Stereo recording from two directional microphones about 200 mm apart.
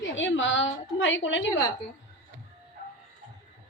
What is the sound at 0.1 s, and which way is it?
A woman's voice, 70° left (ahead or behind).